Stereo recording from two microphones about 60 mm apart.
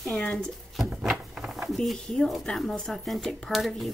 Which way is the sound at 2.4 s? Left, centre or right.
Centre.